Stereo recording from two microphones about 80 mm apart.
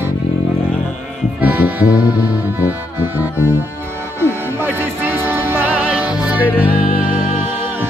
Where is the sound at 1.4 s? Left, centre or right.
Centre.